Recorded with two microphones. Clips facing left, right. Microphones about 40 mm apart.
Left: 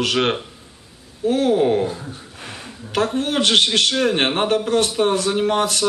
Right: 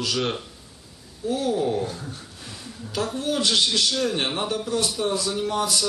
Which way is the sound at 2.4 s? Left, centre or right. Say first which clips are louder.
Left 7 dB; left.